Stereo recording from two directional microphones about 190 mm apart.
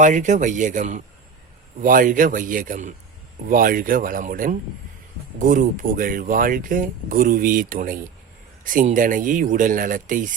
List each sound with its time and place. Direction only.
0.0 s speech: 40° right (ahead or behind)